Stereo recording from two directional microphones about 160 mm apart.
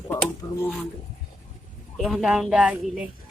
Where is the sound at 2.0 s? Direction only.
Centre (ahead or behind).